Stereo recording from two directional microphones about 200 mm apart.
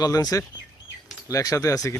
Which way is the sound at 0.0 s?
20° left (ahead or behind).